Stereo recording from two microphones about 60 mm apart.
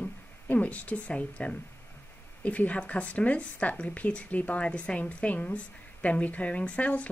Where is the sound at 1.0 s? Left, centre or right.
Left.